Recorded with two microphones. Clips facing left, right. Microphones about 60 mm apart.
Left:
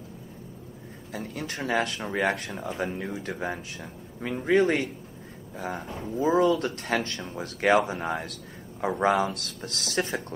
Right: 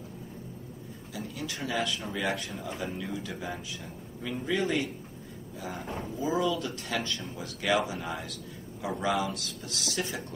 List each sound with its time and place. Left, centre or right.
1.1 s speech: left